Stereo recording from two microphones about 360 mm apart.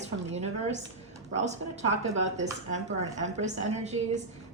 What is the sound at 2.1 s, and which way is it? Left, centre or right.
A woman's voice, centre.